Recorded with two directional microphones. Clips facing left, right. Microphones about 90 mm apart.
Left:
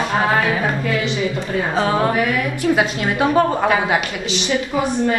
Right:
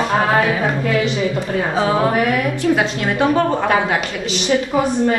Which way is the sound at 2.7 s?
5° left (ahead or behind).